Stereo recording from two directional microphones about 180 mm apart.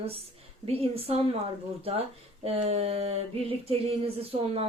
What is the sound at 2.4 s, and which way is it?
A woman's voice, 35° right (ahead or behind).